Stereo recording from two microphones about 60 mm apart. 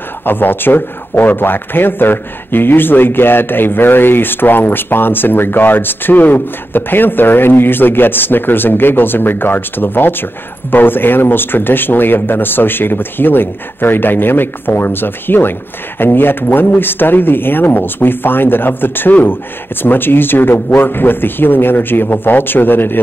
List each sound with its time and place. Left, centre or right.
0.2 s speech: left